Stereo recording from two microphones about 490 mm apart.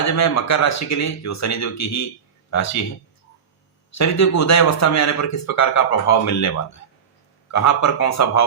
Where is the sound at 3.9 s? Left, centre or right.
Left.